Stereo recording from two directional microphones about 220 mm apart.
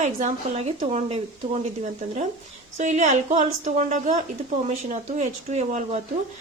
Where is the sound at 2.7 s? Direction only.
30° right (ahead or behind).